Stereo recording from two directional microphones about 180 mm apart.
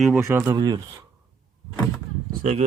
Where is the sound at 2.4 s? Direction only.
40° right (ahead or behind).